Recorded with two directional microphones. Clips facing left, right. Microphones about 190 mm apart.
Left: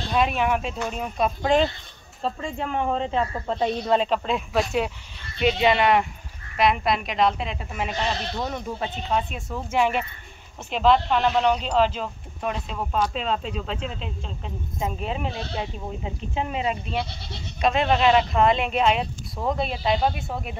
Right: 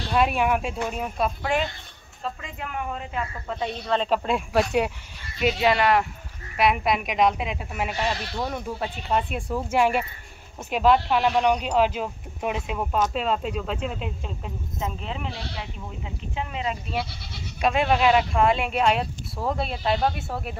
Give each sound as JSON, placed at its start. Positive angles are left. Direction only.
{"t": 0.1, "sound": "speech", "side_deg": -10}
{"t": 2.2, "sound": "speech", "side_deg": 30}
{"t": 4.1, "sound": "speech", "side_deg": -5}
{"t": 14.8, "sound": "speech", "side_deg": 15}
{"t": 17.6, "sound": "speech", "side_deg": -10}